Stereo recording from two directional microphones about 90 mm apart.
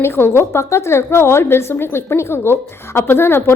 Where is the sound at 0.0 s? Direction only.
30° left (ahead or behind).